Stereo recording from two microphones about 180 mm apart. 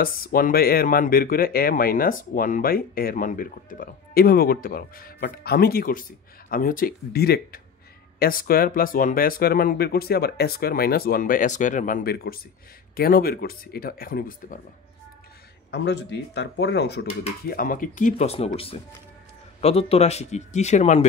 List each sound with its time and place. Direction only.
0.0 s speech: 55° left (ahead or behind)
15.7 s speech: 70° left (ahead or behind)
17.5 s speech: 50° left (ahead or behind)